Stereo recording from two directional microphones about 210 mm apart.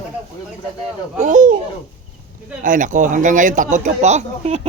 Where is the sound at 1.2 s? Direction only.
35° right (ahead or behind).